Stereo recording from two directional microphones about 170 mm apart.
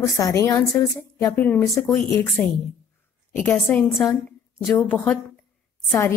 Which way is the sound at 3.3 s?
10° left (ahead or behind).